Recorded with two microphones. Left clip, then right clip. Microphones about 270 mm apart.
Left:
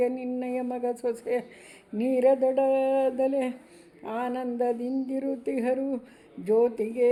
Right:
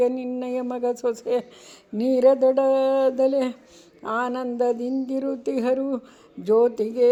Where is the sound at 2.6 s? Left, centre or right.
Right.